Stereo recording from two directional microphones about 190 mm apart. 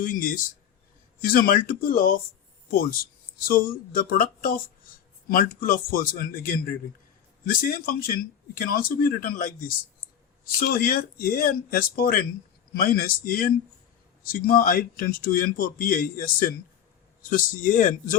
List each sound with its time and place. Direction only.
0.0 s a man's voice: 45° left (ahead or behind)